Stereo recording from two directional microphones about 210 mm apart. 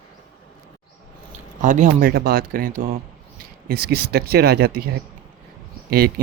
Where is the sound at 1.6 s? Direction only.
35° right (ahead or behind).